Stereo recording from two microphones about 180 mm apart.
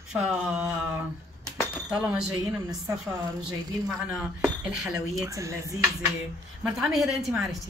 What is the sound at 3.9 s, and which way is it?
Speech, 5° right (ahead or behind).